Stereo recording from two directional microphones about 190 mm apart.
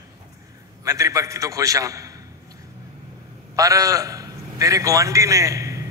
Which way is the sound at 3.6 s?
15° right (ahead or behind).